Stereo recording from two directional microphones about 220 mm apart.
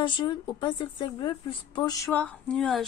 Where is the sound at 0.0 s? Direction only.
20° left (ahead or behind).